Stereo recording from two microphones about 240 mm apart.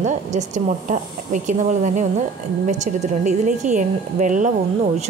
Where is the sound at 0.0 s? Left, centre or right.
Right.